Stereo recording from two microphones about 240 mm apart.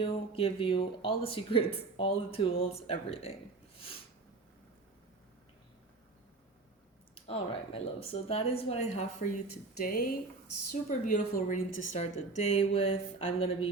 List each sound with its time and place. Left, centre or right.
0.0 s speech: left
7.3 s speech: left
9.8 s a woman's voice: left